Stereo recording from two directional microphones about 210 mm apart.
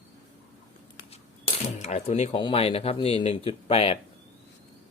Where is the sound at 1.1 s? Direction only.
30° left (ahead or behind).